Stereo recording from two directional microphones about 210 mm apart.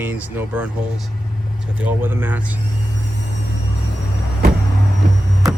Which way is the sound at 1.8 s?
10° right (ahead or behind).